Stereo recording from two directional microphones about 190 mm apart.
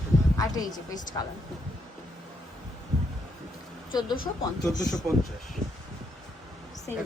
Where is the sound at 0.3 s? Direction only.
20° left (ahead or behind).